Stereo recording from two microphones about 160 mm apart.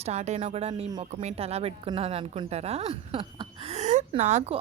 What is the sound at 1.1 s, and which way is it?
A woman's voice, 45° right (ahead or behind).